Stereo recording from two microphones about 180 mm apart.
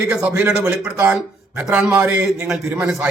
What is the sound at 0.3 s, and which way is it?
A man's voice, 5° right (ahead or behind).